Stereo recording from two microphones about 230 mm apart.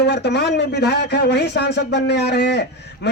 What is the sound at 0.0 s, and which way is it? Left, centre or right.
A man's voice, left.